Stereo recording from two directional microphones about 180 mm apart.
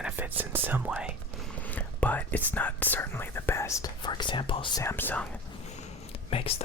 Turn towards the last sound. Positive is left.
turn(degrees=35)  # may be behind; listen again after turning